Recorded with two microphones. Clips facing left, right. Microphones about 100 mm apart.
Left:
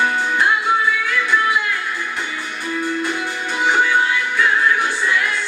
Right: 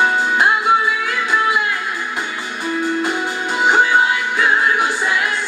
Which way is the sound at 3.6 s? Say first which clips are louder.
Right 3 dB; 20° right (ahead or behind).